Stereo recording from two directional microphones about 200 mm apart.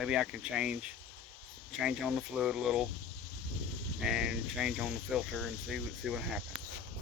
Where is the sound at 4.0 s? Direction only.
5° right (ahead or behind).